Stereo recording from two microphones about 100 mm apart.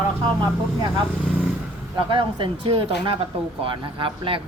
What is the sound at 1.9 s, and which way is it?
Speech, 55° right (ahead or behind).